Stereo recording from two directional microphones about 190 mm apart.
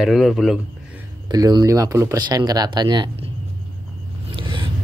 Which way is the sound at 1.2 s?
20° right (ahead or behind).